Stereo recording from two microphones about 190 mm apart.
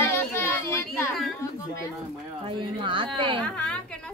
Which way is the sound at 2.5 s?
25° right (ahead or behind).